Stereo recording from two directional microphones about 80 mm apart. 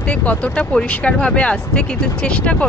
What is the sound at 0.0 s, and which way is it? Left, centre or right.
Speech, centre.